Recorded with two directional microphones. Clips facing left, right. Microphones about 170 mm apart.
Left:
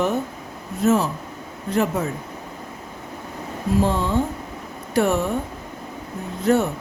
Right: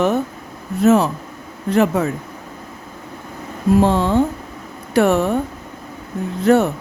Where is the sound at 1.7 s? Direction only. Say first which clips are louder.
Right 6 dB; 75° right (ahead or behind).